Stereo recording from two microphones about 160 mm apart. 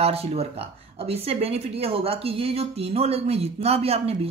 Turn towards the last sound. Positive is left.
turn(degrees=-40)  # may be behind; listen again after turning